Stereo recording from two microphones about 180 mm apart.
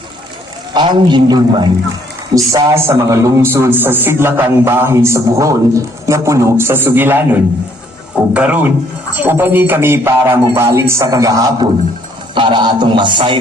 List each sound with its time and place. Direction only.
0.7 s music: 25° right (ahead or behind)
2.3 s a man's voice: 20° right (ahead or behind)
12.3 s music: 25° right (ahead or behind)